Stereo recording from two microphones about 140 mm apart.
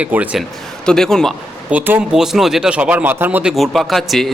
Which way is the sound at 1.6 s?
10° right (ahead or behind).